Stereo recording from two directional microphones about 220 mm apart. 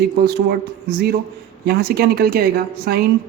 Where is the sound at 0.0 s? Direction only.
45° right (ahead or behind).